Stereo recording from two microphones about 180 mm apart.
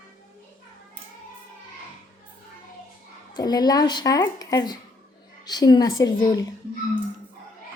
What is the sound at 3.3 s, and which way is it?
Speech, 20° left (ahead or behind).